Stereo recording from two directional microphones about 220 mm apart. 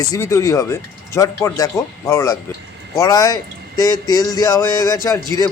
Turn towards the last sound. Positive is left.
turn(degrees=15)  # may be behind; listen again after turning